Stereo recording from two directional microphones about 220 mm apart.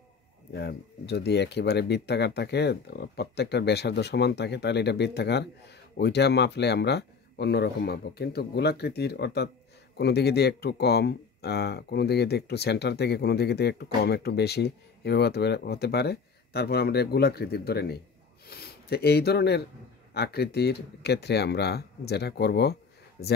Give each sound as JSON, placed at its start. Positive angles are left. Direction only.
{"t": 0.5, "sound": "speech", "side_deg": 50}